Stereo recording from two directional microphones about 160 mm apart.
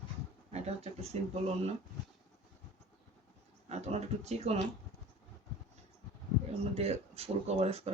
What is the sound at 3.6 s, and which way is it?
Speech, 45° right (ahead or behind).